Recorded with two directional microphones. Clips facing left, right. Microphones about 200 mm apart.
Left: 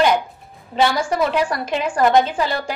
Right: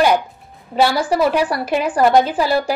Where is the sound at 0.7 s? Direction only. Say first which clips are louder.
Right 2 dB; 5° right (ahead or behind).